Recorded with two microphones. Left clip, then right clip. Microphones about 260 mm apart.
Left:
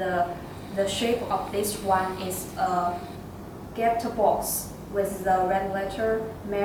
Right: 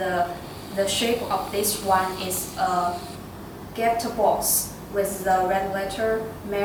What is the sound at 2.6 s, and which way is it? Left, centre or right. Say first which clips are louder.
Speech: right 2 dB; centre.